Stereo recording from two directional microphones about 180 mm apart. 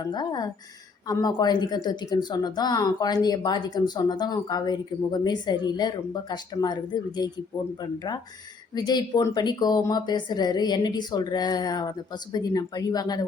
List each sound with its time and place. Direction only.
0.0 s speech: 25° left (ahead or behind)